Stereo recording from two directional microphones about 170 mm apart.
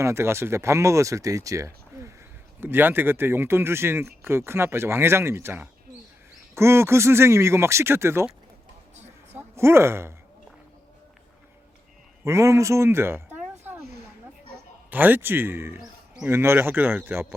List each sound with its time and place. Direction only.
0.0 s speech: 15° right (ahead or behind)
9.4 s speech: 15° right (ahead or behind)
12.2 s a sound: 15° right (ahead or behind)
14.8 s speech: 10° right (ahead or behind)